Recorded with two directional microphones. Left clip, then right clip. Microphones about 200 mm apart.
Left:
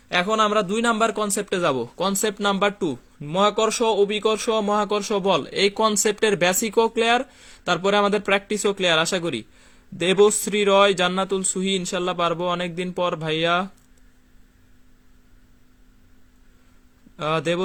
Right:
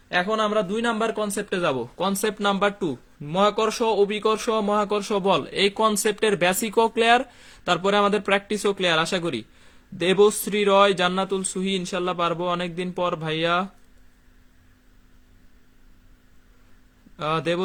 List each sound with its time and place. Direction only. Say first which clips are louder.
0.1 s a man's voice: left 3 dB; 40° left (ahead or behind); by 13.7 s 15° left (ahead or behind)
17.2 s a man's voice: left 1 dB; 15° left (ahead or behind)